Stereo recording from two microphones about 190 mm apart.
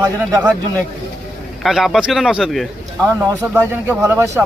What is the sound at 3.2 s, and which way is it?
Speech, 10° right (ahead or behind).